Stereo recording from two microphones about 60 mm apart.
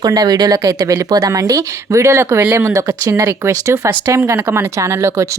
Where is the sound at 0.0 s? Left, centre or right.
Right.